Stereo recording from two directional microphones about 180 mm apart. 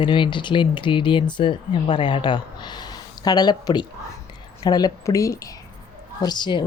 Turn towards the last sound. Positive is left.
turn(degrees=25)  # may be behind; listen again after turning